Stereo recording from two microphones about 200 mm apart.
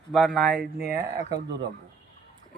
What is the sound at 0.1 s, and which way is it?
Speech, centre (ahead or behind).